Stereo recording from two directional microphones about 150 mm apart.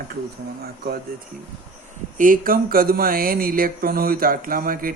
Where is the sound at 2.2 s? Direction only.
70° right (ahead or behind).